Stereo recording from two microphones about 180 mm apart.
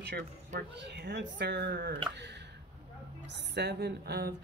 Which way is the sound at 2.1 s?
75° right (ahead or behind).